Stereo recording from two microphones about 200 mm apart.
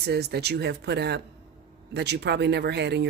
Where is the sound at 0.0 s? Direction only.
55° right (ahead or behind).